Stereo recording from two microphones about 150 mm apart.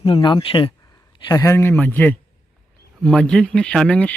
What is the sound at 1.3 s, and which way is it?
Speech, 20° left (ahead or behind).